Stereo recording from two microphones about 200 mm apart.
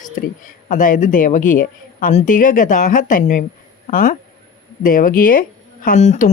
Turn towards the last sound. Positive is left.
turn(degrees=40)  # may be behind; listen again after turning